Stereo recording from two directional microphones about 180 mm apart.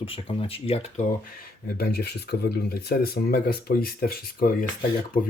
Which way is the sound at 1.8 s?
60° left (ahead or behind).